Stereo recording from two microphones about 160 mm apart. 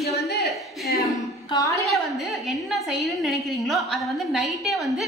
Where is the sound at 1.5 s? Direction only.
20° left (ahead or behind).